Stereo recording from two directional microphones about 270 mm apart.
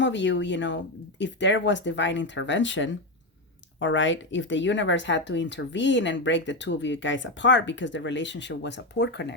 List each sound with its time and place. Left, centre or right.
0.0 s speech: left